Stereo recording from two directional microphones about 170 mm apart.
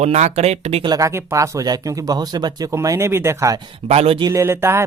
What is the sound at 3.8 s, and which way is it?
Speech, 35° right (ahead or behind).